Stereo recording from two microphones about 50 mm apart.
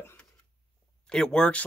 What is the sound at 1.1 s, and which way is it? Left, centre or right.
Speech, centre.